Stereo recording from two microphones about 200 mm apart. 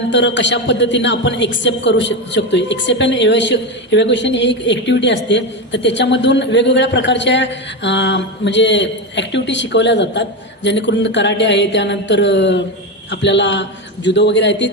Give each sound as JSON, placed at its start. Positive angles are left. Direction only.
{"t": 0.1, "sound": "a woman's voice", "side_deg": 60}